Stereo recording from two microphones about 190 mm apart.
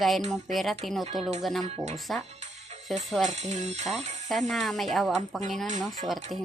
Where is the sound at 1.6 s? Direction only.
35° right (ahead or behind).